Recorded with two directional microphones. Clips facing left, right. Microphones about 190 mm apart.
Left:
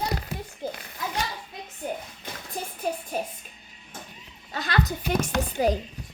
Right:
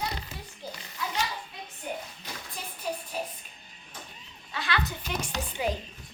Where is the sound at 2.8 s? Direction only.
50° left (ahead or behind).